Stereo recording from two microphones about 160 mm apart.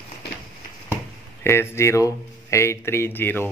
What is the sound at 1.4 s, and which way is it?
Speech, 15° left (ahead or behind).